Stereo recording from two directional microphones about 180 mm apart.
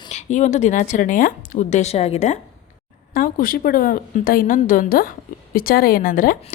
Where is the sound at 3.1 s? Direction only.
50° left (ahead or behind).